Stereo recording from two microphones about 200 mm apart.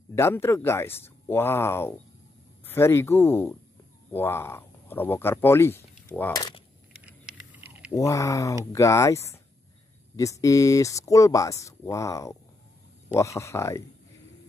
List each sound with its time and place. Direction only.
0.1 s speech: 15° left (ahead or behind)
7.1 s a sound: 5° right (ahead or behind)
7.9 s speech: 15° left (ahead or behind)